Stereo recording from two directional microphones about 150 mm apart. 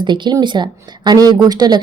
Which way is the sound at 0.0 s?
30° right (ahead or behind).